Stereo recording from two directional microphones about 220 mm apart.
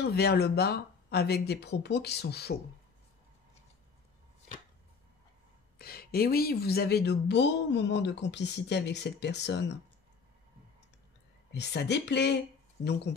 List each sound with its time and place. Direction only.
0.0 s speech: 45° left (ahead or behind)
5.8 s speech: 45° left (ahead or behind)
11.5 s speech: 50° left (ahead or behind)